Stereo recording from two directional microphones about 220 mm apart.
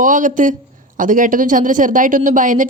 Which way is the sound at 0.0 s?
35° right (ahead or behind).